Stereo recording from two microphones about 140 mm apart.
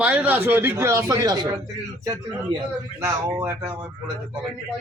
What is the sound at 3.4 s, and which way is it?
Speech, 10° right (ahead or behind).